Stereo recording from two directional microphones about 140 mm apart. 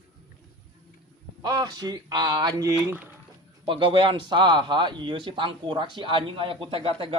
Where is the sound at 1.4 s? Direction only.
25° right (ahead or behind).